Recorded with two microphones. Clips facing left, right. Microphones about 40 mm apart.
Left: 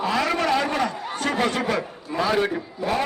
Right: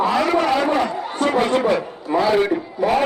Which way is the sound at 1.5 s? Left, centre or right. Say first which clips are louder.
Right 6 dB; right.